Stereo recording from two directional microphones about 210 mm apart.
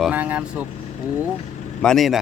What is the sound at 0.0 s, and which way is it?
Speech, 5° right (ahead or behind).